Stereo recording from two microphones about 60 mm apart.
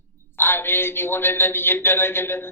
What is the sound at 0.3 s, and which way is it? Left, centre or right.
Speech, left.